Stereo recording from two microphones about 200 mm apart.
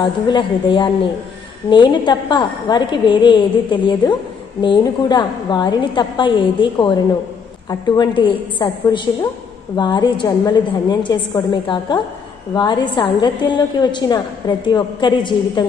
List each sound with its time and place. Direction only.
0.0 s a woman's voice: 25° left (ahead or behind)
7.9 s a woman's voice: 20° left (ahead or behind)